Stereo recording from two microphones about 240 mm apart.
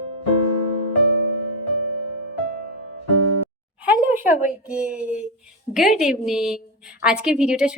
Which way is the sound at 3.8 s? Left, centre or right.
Centre.